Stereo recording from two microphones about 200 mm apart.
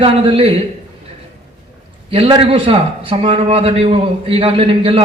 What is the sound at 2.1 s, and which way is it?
A man's voice, 25° right (ahead or behind).